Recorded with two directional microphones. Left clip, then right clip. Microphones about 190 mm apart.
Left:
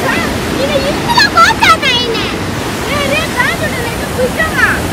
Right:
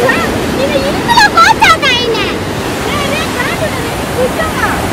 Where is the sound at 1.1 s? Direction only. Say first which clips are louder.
Right 2 dB; 45° right (ahead or behind).